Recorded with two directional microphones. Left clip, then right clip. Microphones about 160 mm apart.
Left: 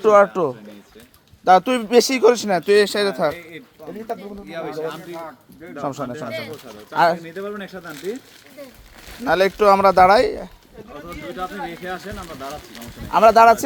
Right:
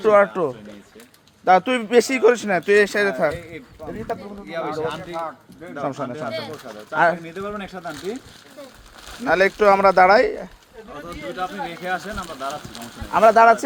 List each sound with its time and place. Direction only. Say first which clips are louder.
0.0 s a man's voice: left 2 dB; 35° left (ahead or behind)
4.4 s speech: right 2 dB; 5° right (ahead or behind)
5.8 s speech: even; 20° left (ahead or behind)
7.4 s speech: right 1 dB; centre (ahead or behind)
7.9 s a man's voice: left 4 dB; 35° left (ahead or behind)
9.0 s speech: even; 20° left (ahead or behind)
11.3 s speech: right 1 dB; 20° right (ahead or behind)
12.2 s speech: right 2 dB; 5° left (ahead or behind)
13.1 s speech: left 1 dB; 30° left (ahead or behind)